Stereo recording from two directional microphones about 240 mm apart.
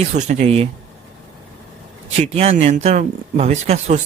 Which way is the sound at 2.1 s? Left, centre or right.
Right.